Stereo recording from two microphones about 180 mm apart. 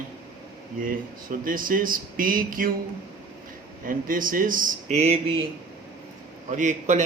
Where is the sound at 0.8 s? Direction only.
50° right (ahead or behind).